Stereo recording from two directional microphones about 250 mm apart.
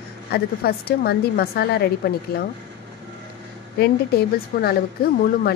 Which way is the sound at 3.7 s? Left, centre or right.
Left.